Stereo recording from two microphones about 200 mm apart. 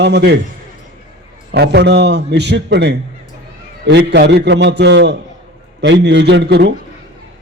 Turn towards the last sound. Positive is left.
turn(degrees=-55)  # may be behind; listen again after turning